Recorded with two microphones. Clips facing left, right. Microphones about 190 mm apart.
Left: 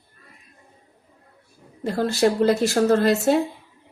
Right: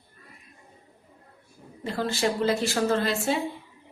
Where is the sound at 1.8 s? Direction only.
40° left (ahead or behind).